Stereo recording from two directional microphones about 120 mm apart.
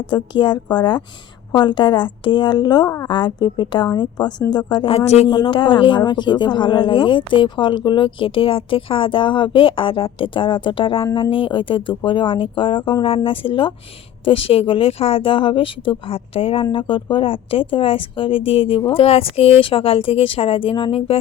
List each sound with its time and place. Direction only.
0.0 s a woman's voice: 40° left (ahead or behind)
4.9 s speech: 60° left (ahead or behind)
5.3 s a woman's voice: 40° left (ahead or behind)